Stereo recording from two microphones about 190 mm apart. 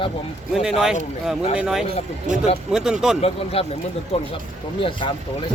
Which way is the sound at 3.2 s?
30° left (ahead or behind).